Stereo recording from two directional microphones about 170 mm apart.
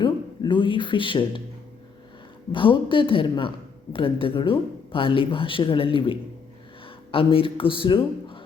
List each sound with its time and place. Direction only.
0.0 s speech: 30° left (ahead or behind)
2.5 s a woman's voice: 30° left (ahead or behind)